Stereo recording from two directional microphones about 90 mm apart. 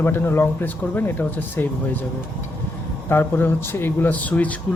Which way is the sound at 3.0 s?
25° left (ahead or behind).